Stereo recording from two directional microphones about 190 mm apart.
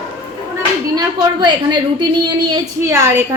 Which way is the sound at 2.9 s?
15° right (ahead or behind).